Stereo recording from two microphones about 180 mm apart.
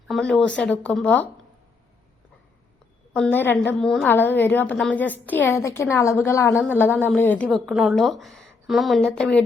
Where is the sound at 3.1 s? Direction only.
10° left (ahead or behind).